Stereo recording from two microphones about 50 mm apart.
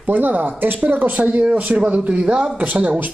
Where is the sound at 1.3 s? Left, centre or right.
Right.